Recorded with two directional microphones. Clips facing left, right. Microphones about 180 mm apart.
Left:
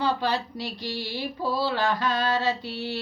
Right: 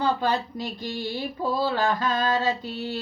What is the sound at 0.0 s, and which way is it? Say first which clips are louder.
Speech: right 2 dB; 50° right (ahead or behind).